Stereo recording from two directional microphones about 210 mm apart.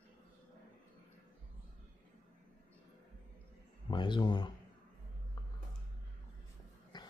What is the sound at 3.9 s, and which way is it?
Speech, 20° left (ahead or behind).